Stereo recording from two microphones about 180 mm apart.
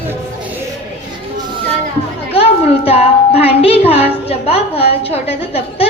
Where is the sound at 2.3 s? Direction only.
30° left (ahead or behind).